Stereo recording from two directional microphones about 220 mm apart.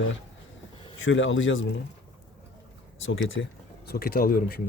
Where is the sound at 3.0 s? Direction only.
60° left (ahead or behind); by 4.6 s 40° left (ahead or behind).